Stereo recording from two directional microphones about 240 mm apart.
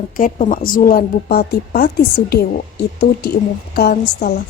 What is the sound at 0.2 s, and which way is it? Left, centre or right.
Speech, left.